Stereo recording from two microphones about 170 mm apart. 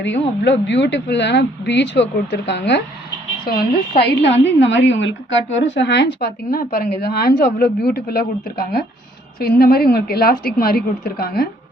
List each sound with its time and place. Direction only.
0.0 s speech: 90° left
3.4 s speech: 60° left (ahead or behind)
4.0 s a woman's voice: 90° left; by 11.4 s 65° left (ahead or behind)